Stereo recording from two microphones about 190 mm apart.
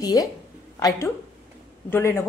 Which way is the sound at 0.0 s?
20° left (ahead or behind).